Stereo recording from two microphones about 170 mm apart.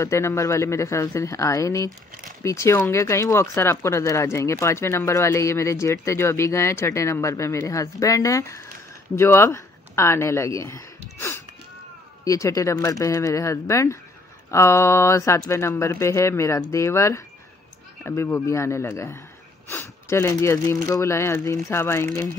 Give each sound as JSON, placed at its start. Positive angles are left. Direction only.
{"t": 0.0, "sound": "speech", "side_deg": 15}